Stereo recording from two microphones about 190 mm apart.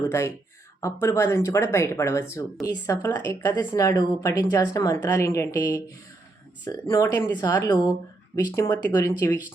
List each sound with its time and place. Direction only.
0.0 s a woman's voice: 15° left (ahead or behind)